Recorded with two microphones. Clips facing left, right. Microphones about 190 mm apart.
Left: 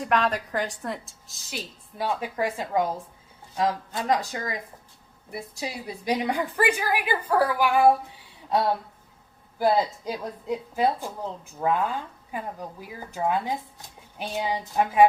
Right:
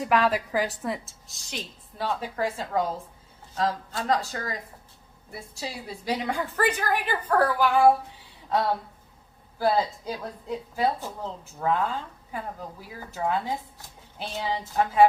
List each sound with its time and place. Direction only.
0.0 s a woman's voice: 5° right (ahead or behind)
9.6 s a woman's voice: 15° left (ahead or behind)